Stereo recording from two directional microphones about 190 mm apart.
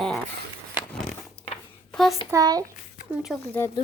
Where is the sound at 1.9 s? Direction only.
Centre (ahead or behind).